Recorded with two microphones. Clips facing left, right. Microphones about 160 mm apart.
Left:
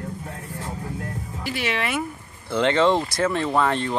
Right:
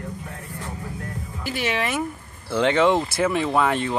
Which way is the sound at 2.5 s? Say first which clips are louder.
Even; 10° right (ahead or behind).